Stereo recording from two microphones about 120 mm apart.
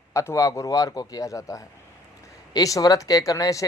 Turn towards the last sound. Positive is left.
turn(degrees=25)  # may be behind; listen again after turning